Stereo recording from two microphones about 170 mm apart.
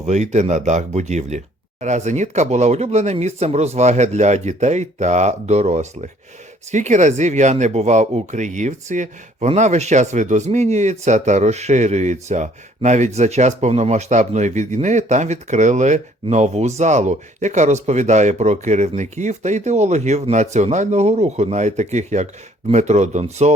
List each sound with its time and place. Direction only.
0.0 s speech: 45° right (ahead or behind)